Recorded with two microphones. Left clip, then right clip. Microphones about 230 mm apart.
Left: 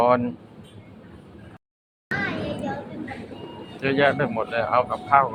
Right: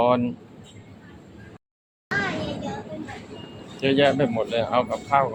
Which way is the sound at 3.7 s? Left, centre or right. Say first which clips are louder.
Right 1 dB; right.